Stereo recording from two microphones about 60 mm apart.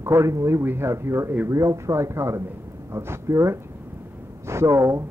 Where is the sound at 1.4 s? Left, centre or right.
Right.